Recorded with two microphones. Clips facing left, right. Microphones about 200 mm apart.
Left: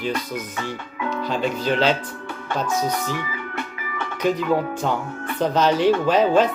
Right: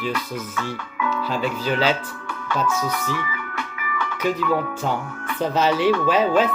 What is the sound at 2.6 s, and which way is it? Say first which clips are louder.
Speech: even; 35° left (ahead or behind).